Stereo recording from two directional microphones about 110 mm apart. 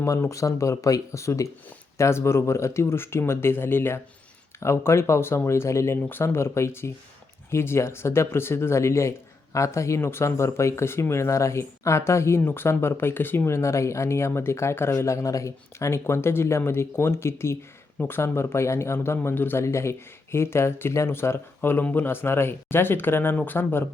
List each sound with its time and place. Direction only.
0.0 s speech: 25° left (ahead or behind)